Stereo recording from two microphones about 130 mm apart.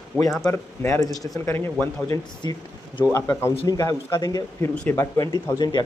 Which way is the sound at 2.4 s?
35° left (ahead or behind).